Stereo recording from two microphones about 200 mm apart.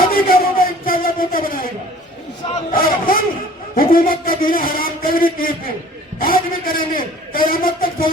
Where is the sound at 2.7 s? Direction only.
45° left (ahead or behind).